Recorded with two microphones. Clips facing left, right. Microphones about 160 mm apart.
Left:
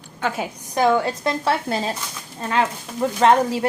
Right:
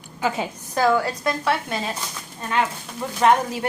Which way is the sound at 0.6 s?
20° left (ahead or behind).